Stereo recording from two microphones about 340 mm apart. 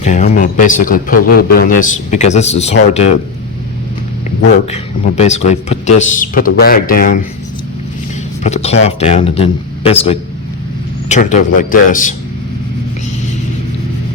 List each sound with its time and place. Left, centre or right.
0.0 s a man's voice: left
4.7 s a man's voice: centre
8.4 s a man's voice: centre